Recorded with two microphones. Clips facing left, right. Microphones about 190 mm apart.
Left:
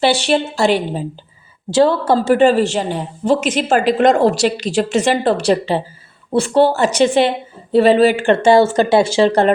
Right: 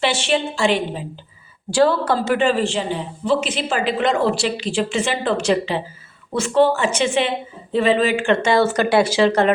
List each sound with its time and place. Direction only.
0.0 s a woman's voice: 35° left (ahead or behind)
1.7 s a woman's voice: 25° left (ahead or behind)